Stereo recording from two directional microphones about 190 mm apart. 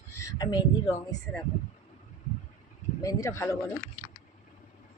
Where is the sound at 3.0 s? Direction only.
15° left (ahead or behind).